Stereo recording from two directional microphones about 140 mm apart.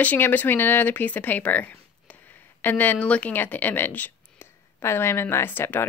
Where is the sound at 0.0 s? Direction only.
10° left (ahead or behind).